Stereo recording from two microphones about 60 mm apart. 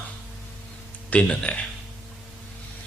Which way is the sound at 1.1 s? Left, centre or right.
Centre.